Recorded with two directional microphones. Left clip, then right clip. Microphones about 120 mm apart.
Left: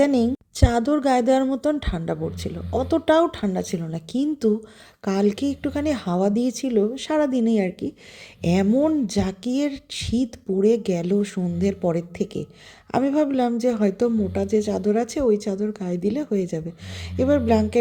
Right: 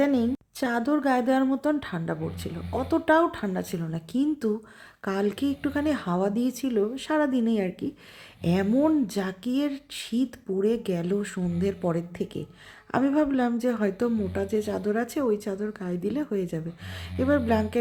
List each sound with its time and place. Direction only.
0.0 s a woman's voice: 45° left (ahead or behind); by 17.7 s 25° left (ahead or behind)